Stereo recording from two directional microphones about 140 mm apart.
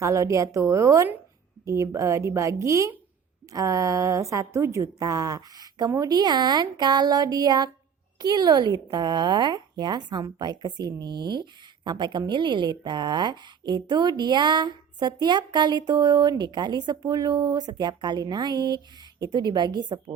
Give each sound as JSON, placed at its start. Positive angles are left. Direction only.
{"t": 0.0, "sound": "a woman's voice", "side_deg": -20}